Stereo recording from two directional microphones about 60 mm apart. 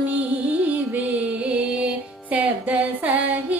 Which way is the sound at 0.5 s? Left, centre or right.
Right.